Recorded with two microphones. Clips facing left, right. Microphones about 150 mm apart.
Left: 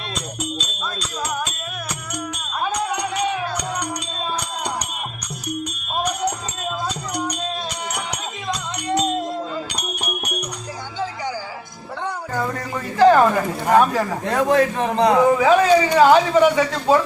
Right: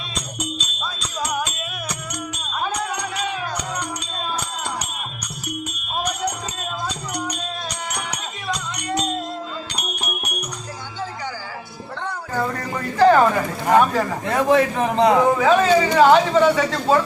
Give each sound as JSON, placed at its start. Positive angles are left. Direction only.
{"t": 12.3, "sound": "a sound", "side_deg": -5}
{"t": 13.7, "sound": "a man's voice", "side_deg": 5}
{"t": 15.2, "sound": "speech", "side_deg": 10}